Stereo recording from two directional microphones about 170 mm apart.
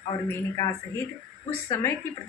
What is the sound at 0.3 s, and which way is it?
Speech, 20° left (ahead or behind).